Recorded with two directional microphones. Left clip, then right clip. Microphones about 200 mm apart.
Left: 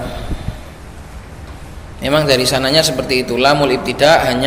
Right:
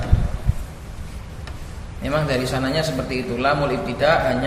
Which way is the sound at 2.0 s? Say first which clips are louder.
Left 9 dB; 45° left (ahead or behind).